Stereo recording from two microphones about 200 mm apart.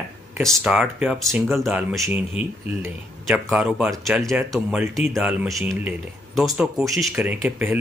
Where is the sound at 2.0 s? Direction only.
10° right (ahead or behind).